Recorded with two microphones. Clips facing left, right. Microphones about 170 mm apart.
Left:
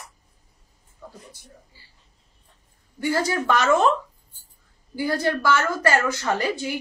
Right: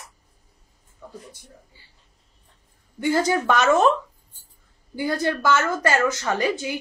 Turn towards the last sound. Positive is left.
turn(degrees=-20)  # may be behind; listen again after turning